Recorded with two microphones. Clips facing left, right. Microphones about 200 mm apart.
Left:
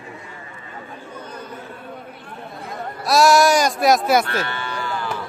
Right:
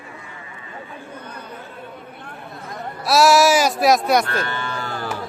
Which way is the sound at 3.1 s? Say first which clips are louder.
Even; centre (ahead or behind).